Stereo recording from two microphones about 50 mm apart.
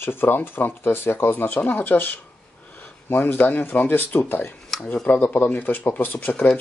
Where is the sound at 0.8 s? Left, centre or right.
Left.